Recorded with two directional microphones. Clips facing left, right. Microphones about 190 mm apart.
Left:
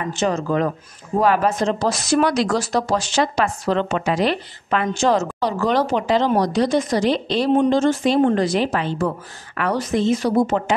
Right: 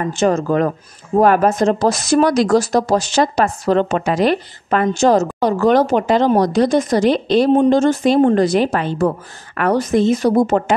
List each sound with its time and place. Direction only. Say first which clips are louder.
0.0 s speech: right 5 dB; 45° right (ahead or behind)